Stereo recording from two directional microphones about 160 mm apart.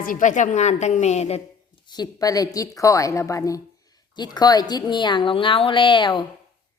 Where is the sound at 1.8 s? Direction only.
25° left (ahead or behind).